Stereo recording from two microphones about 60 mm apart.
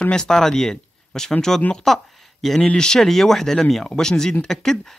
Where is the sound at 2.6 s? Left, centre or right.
Centre.